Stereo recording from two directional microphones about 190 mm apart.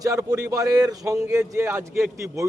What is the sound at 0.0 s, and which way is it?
A man's voice, 15° right (ahead or behind).